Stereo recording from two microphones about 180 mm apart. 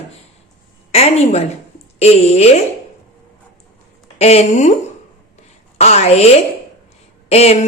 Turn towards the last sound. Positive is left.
turn(degrees=35)  # may be behind; listen again after turning